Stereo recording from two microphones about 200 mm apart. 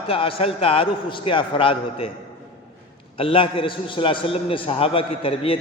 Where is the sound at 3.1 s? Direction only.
25° left (ahead or behind).